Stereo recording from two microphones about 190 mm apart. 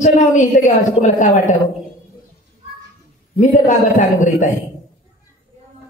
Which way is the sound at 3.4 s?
40° left (ahead or behind).